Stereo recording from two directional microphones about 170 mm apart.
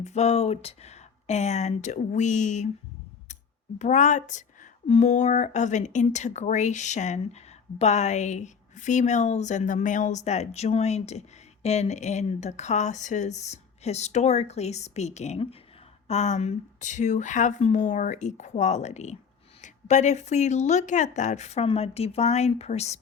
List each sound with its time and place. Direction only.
0.0 s speech: 40° left (ahead or behind)
3.8 s speech: 45° left (ahead or behind)